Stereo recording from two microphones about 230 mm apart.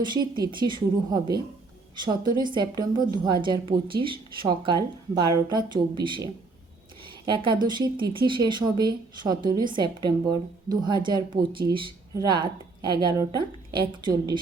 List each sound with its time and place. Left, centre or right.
0.0 s a woman's voice: centre